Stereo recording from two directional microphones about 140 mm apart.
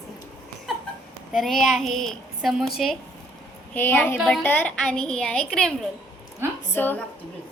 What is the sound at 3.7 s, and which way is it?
A woman's voice, 15° left (ahead or behind).